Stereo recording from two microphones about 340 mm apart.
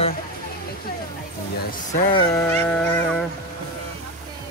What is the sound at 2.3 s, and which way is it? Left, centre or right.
Music, centre.